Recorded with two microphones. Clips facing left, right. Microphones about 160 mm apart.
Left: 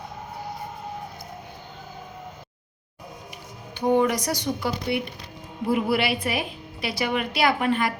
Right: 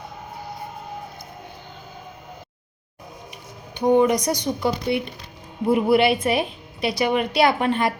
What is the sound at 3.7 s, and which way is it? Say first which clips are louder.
A woman's voice: right 4 dB; 15° right (ahead or behind).